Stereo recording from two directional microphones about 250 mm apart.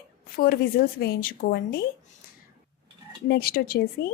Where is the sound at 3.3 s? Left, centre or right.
Left.